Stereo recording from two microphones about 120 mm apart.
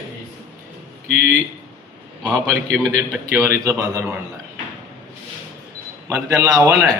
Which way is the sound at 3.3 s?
20° right (ahead or behind).